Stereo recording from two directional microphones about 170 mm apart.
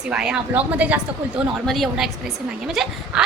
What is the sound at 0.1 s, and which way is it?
A woman's voice, 5° right (ahead or behind).